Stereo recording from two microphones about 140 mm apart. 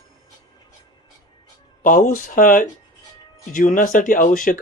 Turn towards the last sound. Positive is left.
turn(degrees=70)  # may be behind; listen again after turning